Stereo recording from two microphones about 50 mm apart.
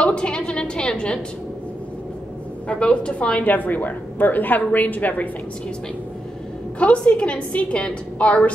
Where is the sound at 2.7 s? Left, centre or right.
Left.